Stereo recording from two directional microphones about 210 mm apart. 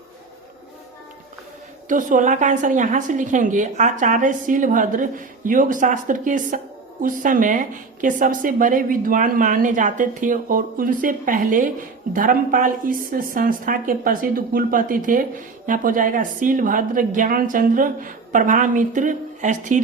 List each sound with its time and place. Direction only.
1.9 s a woman's voice: 40° right (ahead or behind)